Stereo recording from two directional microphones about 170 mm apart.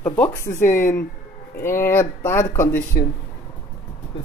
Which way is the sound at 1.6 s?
15° left (ahead or behind).